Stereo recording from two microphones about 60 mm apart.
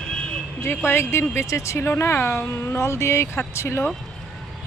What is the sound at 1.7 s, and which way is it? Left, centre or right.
Speech, left.